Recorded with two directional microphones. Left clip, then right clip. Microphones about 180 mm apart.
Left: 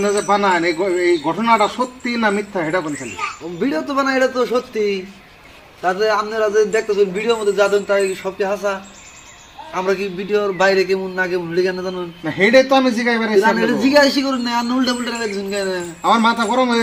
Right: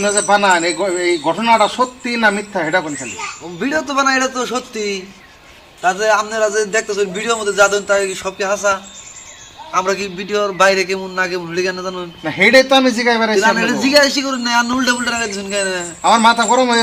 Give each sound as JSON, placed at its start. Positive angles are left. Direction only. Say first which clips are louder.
{"t": 0.0, "sound": "a man's voice", "louder": "right 3 dB", "side_deg": -10}
{"t": 3.6, "sound": "a man's voice", "louder": "right 3 dB", "side_deg": 15}
{"t": 9.7, "sound": "a man's voice", "louder": "right 2 dB", "side_deg": 20}
{"t": 12.2, "sound": "a man's voice", "louder": "right 2 dB", "side_deg": -15}
{"t": 13.6, "sound": "a man's voice", "louder": "right 1 dB", "side_deg": 15}
{"t": 16.0, "sound": "a man's voice", "louder": "right 4 dB", "side_deg": -15}